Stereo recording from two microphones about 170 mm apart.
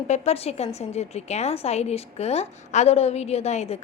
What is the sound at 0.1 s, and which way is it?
A woman's voice, 35° left (ahead or behind).